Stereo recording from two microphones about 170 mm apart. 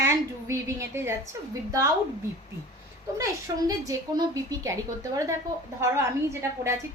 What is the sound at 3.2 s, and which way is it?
A woman's voice, 20° right (ahead or behind).